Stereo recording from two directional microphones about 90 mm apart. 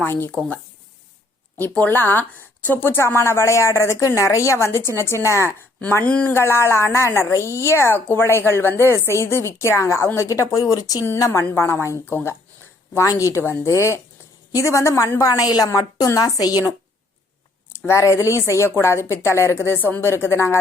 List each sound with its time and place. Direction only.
0.0 s a woman's voice: 20° left (ahead or behind)
1.5 s a woman's voice: 20° left (ahead or behind)
6.0 s speech: 15° left (ahead or behind)
6.3 s a woman's voice: 30° left (ahead or behind)
11.3 s a woman's voice: 30° left (ahead or behind)
13.1 s a woman's voice: 35° left (ahead or behind)
17.7 s a woman's voice: 25° left (ahead or behind)